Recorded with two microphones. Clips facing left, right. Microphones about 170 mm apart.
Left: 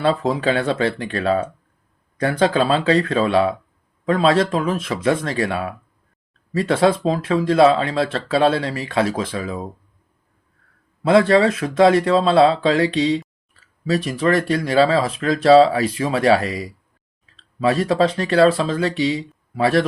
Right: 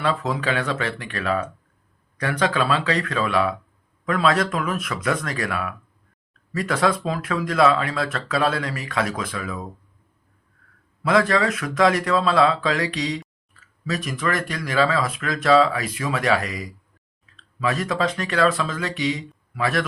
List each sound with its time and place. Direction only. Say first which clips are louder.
0.0 s speech: left 5 dB; 30° left (ahead or behind)
11.0 s speech: left 6 dB; 30° left (ahead or behind)